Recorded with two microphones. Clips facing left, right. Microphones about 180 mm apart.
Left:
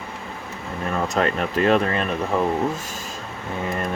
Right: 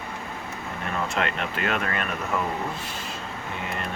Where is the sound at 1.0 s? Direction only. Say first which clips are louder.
Left 6 dB; 40° left (ahead or behind).